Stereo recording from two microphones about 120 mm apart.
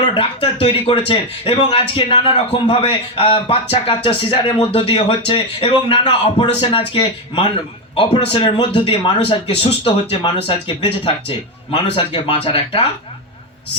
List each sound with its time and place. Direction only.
0.0 s a man's voice: 50° left (ahead or behind)
8.8 s a man's voice: 55° left (ahead or behind)